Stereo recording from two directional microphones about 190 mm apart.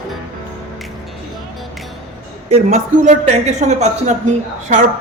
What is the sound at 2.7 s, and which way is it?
A man's voice, 40° right (ahead or behind).